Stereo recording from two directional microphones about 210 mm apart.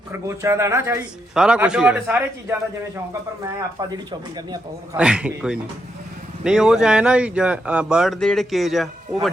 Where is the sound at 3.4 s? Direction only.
20° right (ahead or behind).